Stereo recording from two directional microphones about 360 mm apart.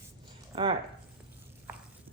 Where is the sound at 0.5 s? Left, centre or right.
Centre.